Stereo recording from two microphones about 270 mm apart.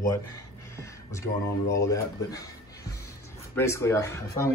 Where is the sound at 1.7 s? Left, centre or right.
Centre.